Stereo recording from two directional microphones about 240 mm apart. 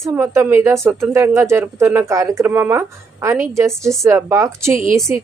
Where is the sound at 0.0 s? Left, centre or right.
Centre.